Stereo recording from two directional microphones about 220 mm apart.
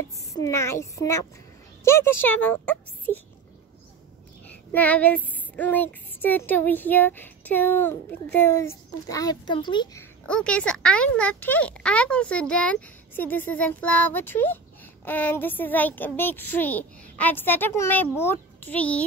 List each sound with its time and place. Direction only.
0.3 s child singing: 15° left (ahead or behind)
3.1 s speech: 35° left (ahead or behind)
4.5 s child singing: 5° left (ahead or behind)
10.2 s speech: 5° left (ahead or behind)
15.0 s child singing: 10° left (ahead or behind)